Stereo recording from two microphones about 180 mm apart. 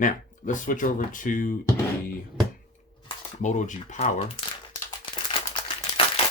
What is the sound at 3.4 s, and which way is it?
Speech, 45° left (ahead or behind).